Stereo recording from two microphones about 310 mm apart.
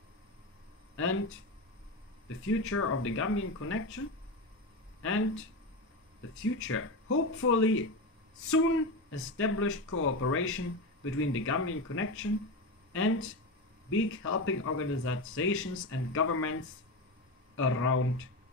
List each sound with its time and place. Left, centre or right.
0.9 s speech: left
2.2 s speech: left
5.0 s speech: left
6.4 s speech: left